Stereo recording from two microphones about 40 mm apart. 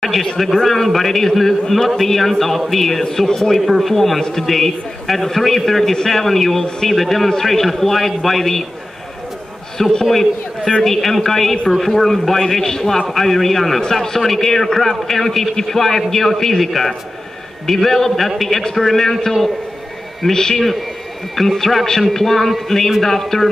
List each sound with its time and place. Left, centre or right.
0.0 s a man's voice: centre
4.2 s a man's voice: centre
4.5 s a man's voice: centre
9.8 s a man's voice: centre